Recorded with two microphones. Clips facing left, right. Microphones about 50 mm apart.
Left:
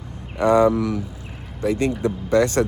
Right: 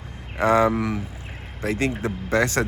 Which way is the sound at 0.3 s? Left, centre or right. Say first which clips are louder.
Left 3 dB; right.